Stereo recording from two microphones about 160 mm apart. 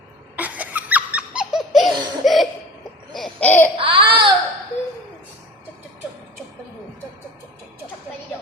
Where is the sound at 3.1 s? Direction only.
5° left (ahead or behind).